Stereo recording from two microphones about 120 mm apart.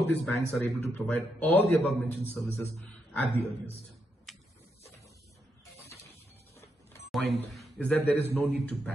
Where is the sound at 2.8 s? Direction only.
10° left (ahead or behind).